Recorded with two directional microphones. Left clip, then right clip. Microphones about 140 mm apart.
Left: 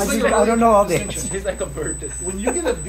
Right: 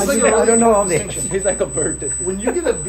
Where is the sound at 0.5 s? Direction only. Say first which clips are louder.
Even; 35° left (ahead or behind).